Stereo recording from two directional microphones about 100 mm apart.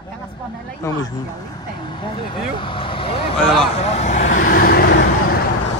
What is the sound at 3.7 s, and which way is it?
Speech, 90° left.